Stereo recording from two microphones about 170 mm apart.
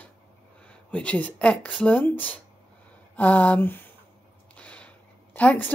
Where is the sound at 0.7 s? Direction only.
10° left (ahead or behind).